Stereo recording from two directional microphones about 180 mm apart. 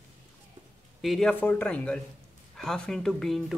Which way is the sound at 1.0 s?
Centre (ahead or behind).